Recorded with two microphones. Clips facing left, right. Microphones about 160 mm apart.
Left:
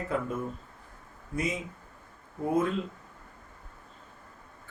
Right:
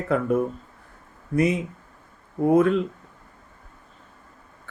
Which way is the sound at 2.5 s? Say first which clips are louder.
Right 9 dB; 70° right (ahead or behind).